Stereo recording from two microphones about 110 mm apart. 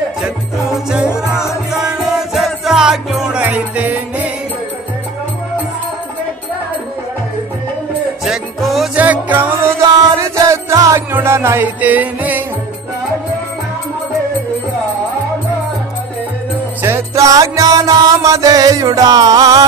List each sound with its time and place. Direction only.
0.2 s jingle bell: 5° right (ahead or behind)
1.3 s music: 25° left (ahead or behind)
1.7 s music: 5° right (ahead or behind)
8.3 s music: centre (ahead or behind)
8.9 s music: 15° right (ahead or behind)
16.8 s music: 25° right (ahead or behind)